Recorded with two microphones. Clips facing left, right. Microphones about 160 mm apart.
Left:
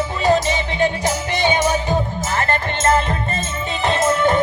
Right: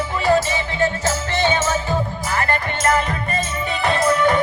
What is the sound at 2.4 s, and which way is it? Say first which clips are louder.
Music: left 1 dB; 25° left (ahead or behind).